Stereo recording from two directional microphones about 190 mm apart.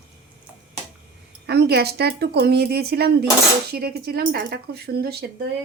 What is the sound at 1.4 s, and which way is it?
Speech, 60° right (ahead or behind).